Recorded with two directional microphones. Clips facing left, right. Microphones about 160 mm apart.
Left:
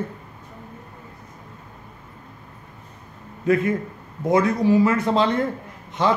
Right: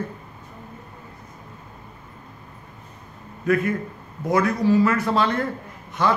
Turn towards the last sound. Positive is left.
turn(degrees=25)  # may be behind; listen again after turning